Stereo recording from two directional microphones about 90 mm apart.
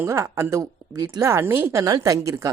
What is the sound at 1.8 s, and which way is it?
Speech, 45° right (ahead or behind).